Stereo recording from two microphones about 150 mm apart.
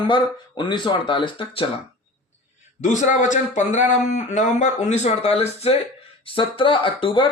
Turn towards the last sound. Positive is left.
turn(degrees=35)  # may be behind; listen again after turning